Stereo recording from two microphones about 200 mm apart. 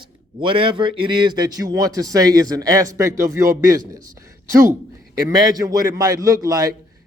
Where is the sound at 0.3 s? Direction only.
25° right (ahead or behind).